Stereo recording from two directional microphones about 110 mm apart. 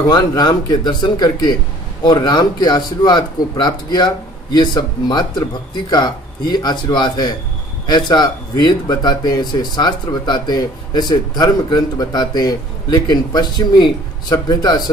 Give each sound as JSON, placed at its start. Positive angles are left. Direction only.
{"t": 0.4, "sound": "speech", "side_deg": 40}